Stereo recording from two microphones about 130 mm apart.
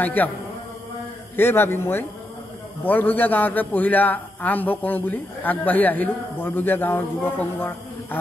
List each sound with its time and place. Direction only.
0.0 s a man's voice: 15° left (ahead or behind)
1.3 s a man's voice: 15° left (ahead or behind)